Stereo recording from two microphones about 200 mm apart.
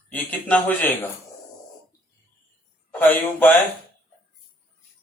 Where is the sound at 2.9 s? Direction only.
10° left (ahead or behind).